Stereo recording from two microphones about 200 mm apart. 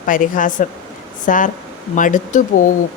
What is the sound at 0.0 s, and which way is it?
Speech, 40° left (ahead or behind).